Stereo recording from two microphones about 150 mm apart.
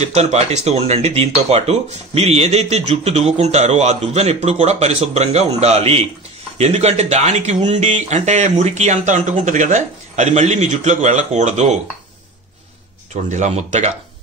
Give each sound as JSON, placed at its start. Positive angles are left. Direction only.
{"t": 0.0, "sound": "speech", "side_deg": -45}
{"t": 13.1, "sound": "speech", "side_deg": -50}